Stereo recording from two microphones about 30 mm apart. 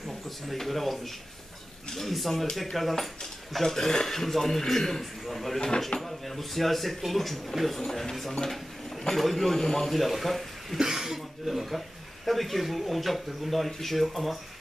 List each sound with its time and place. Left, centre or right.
0.6 s speech: centre
2.0 s a man's voice: centre
9.6 s a man's voice: centre
9.8 s speech: centre
10.8 s a sound: centre
11.4 s speech: centre